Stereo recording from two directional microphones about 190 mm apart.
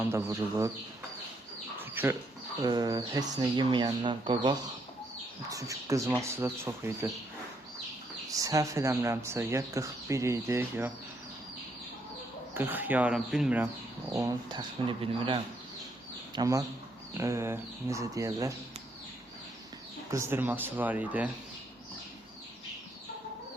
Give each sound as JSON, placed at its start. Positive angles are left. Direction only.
{"t": 0.0, "sound": "speech", "side_deg": -15}
{"t": 1.8, "sound": "bird", "side_deg": -10}
{"t": 2.6, "sound": "speech", "side_deg": -20}
{"t": 8.3, "sound": "speech", "side_deg": -20}
{"t": 12.5, "sound": "speech", "side_deg": -10}
{"t": 14.1, "sound": "speech", "side_deg": -20}
{"t": 20.1, "sound": "speech", "side_deg": -15}